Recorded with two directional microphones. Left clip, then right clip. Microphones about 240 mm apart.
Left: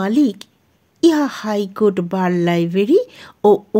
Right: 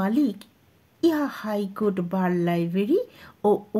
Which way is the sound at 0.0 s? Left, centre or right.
Left.